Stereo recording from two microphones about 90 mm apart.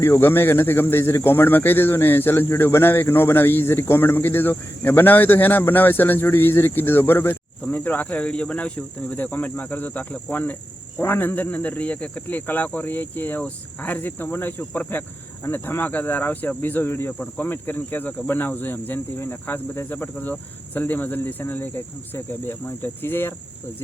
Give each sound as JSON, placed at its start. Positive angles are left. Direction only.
{"t": 0.0, "sound": "speech", "side_deg": 25}
{"t": 20.1, "sound": "speech", "side_deg": 15}